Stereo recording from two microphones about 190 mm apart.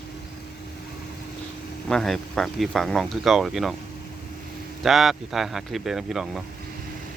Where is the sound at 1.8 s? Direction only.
Centre (ahead or behind).